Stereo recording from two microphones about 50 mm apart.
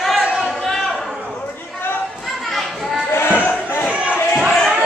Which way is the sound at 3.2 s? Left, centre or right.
Left.